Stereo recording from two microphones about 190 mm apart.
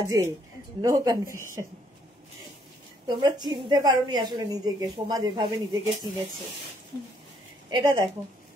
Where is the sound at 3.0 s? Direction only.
20° right (ahead or behind).